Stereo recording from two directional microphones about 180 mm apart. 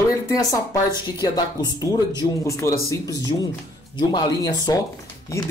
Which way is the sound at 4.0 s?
25° left (ahead or behind).